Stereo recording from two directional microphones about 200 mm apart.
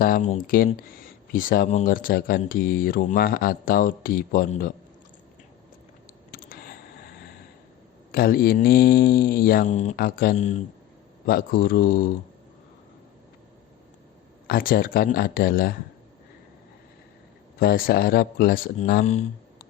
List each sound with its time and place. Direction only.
0.0 s speech: 40° left (ahead or behind)
6.3 s a sound: 50° left (ahead or behind)
8.1 s speech: 50° left (ahead or behind)
9.9 s speech: 45° left (ahead or behind)
11.3 s speech: 45° left (ahead or behind)
14.4 s speech: 45° left (ahead or behind)
17.6 s speech: 45° left (ahead or behind)